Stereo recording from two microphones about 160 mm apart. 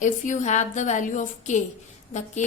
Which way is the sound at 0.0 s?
50° left (ahead or behind).